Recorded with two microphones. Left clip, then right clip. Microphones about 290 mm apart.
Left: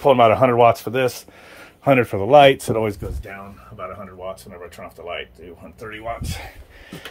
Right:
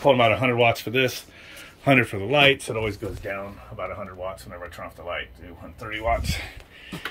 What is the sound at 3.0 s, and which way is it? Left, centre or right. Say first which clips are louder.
Speech: even; centre.